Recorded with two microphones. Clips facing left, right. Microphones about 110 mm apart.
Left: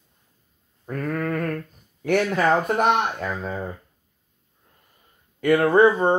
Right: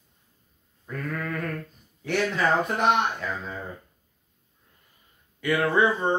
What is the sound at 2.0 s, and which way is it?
Speech, 50° left (ahead or behind).